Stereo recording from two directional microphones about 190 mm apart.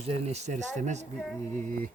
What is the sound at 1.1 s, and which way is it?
Female singing, 5° left (ahead or behind).